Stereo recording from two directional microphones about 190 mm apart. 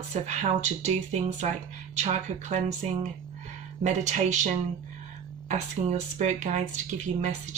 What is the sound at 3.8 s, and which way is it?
Speech, 40° right (ahead or behind).